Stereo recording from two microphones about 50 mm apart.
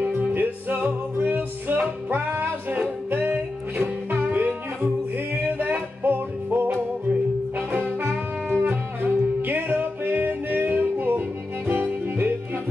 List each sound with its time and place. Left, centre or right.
0.2 s music: right
8.0 s music: right